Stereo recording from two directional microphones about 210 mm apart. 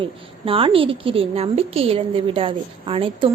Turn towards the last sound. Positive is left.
turn(degrees=-25)  # may be behind; listen again after turning